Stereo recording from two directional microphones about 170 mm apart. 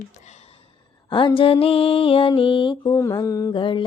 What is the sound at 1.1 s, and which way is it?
Mantra, 30° left (ahead or behind).